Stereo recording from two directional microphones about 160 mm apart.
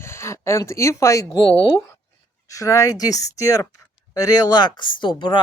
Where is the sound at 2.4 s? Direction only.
20° left (ahead or behind).